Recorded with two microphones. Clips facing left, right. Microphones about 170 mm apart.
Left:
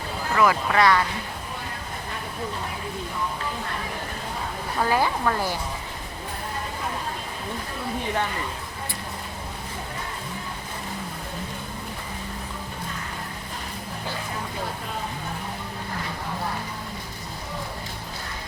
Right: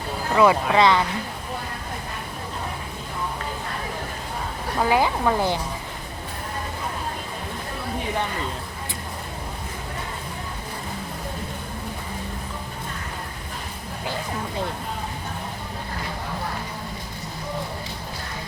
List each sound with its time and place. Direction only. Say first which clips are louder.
0.3 s speech: right 3 dB; 20° right (ahead or behind)
4.8 s speech: right 2 dB; 15° right (ahead or behind)